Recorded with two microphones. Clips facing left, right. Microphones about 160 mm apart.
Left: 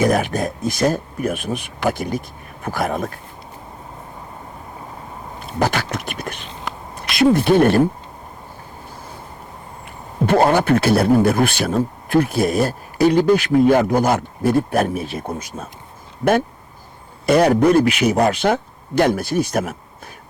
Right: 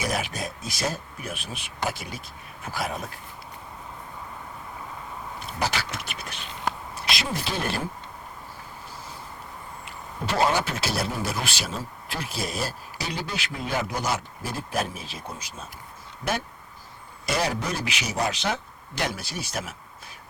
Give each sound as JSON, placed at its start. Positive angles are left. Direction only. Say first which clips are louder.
{"t": 0.0, "sound": "speech", "louder": "left 11 dB", "side_deg": 50}
{"t": 5.5, "sound": "a sound", "louder": "left 9 dB", "side_deg": 50}
{"t": 6.9, "sound": "speech", "louder": "left 15 dB", "side_deg": 55}
{"t": 9.8, "sound": "speech", "louder": "left 12 dB", "side_deg": 55}
{"t": 17.2, "sound": "speech", "louder": "left 14 dB", "side_deg": 55}